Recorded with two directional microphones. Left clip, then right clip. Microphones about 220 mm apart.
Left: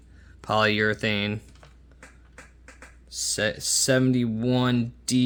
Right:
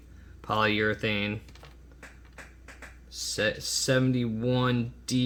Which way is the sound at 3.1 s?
45° left (ahead or behind).